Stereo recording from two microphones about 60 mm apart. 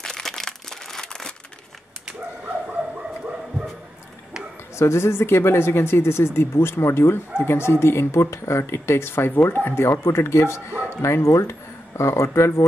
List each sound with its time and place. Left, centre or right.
0.0 s crumpling: centre
4.7 s speech: left